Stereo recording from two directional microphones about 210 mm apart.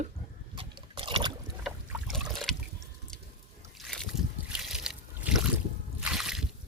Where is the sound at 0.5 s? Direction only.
25° right (ahead or behind).